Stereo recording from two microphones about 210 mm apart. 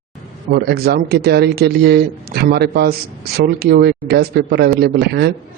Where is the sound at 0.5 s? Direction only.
50° right (ahead or behind).